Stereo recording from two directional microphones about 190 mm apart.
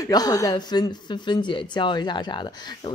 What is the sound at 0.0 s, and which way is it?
Speech, 20° left (ahead or behind).